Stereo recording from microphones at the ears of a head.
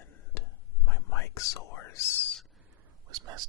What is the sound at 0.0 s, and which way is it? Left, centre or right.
Whispering, left.